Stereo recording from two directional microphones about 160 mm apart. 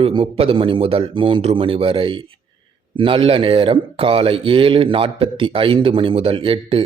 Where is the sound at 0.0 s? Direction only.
35° right (ahead or behind).